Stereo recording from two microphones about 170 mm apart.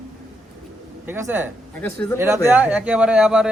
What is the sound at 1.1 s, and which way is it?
Speech, 15° right (ahead or behind).